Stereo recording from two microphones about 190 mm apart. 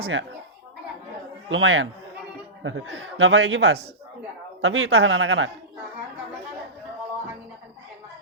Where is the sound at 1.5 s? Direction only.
90° right.